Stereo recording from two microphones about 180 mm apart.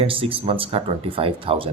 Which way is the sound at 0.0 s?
30° right (ahead or behind).